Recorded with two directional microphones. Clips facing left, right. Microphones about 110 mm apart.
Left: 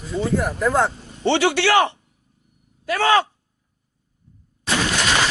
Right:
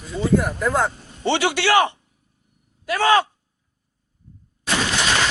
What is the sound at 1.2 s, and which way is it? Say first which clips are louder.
A man's voice: left 2 dB; 15° right (ahead or behind).